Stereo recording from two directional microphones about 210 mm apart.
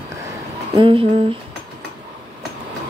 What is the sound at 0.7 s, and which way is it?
Speech, 25° right (ahead or behind).